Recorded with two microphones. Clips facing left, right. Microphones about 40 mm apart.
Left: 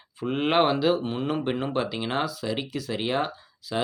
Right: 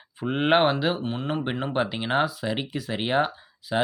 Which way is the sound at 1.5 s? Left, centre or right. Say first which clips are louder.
Even; centre.